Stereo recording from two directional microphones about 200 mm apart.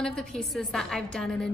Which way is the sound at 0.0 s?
5° left (ahead or behind).